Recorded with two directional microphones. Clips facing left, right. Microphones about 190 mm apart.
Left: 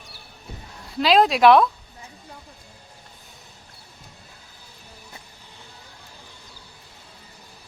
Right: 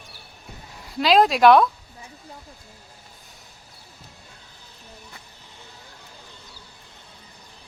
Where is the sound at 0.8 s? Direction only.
Centre (ahead or behind).